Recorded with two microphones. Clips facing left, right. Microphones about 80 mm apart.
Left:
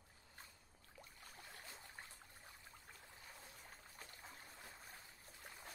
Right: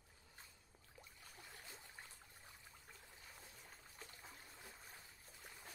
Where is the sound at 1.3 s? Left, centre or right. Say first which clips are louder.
Left 1 dB; centre.